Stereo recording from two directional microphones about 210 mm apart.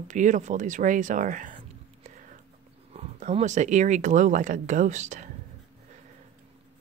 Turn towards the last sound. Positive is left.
turn(degrees=-35)  # may be behind; listen again after turning